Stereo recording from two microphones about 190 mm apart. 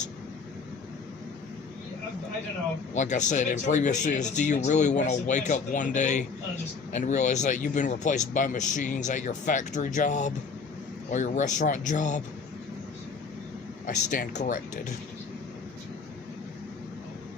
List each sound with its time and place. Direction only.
2.9 s speech: 40° left (ahead or behind)
13.8 s speech: 45° left (ahead or behind)